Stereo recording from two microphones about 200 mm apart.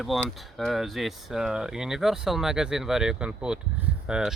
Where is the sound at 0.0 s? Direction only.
Centre (ahead or behind).